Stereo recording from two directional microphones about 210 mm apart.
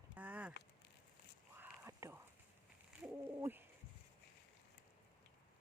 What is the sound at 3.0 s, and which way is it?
Speech, 10° right (ahead or behind).